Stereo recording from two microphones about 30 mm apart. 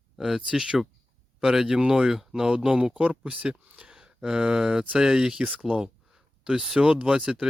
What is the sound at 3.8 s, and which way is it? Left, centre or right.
Speech, right.